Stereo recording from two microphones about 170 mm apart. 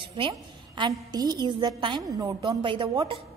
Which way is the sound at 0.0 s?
30° right (ahead or behind).